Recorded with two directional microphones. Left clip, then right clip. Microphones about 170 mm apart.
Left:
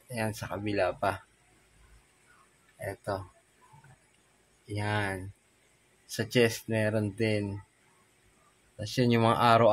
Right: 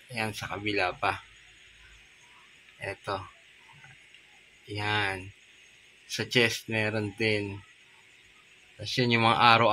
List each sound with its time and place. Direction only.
0.1 s speech: 30° left (ahead or behind)
2.8 s speech: 20° left (ahead or behind)
4.7 s speech: 25° left (ahead or behind)
8.8 s speech: 30° left (ahead or behind)